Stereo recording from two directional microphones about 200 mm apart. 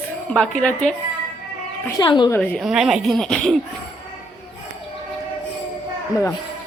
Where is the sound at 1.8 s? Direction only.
20° left (ahead or behind).